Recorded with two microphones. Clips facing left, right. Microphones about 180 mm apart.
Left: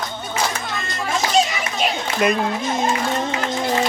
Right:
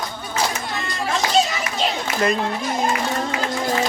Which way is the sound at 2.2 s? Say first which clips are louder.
Left 2 dB; 20° left (ahead or behind).